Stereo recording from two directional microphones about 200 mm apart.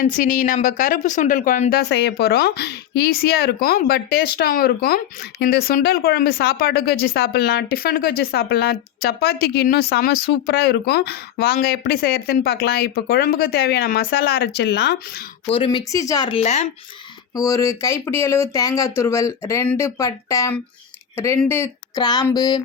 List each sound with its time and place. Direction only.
0.0 s speech: 40° left (ahead or behind)
1.7 s speech: 55° left (ahead or behind)
15.4 s speech: 25° left (ahead or behind)
16.4 s speech: 35° left (ahead or behind)
17.3 s speech: 15° left (ahead or behind)